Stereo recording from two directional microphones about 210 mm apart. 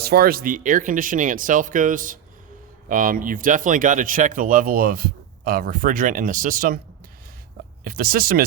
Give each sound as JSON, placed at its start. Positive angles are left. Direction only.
{"t": 0.0, "sound": "speech", "side_deg": -45}
{"t": 7.9, "sound": "speech", "side_deg": -45}